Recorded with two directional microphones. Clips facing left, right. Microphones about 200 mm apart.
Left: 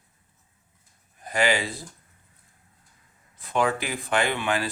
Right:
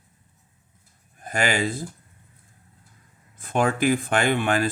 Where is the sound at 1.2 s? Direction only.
50° right (ahead or behind).